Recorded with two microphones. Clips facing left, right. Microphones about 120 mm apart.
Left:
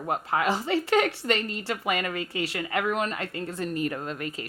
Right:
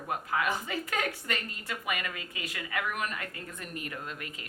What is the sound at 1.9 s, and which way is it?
Speech, 30° left (ahead or behind).